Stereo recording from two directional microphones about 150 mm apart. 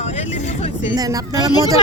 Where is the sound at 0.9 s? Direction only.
25° right (ahead or behind).